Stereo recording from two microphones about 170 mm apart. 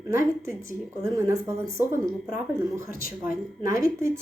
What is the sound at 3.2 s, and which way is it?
Speech, 15° right (ahead or behind).